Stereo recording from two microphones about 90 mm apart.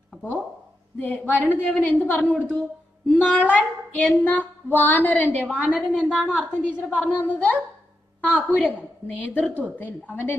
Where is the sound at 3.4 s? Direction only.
20° left (ahead or behind).